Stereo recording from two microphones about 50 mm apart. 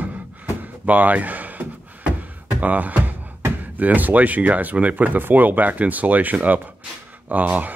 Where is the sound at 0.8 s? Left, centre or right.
Right.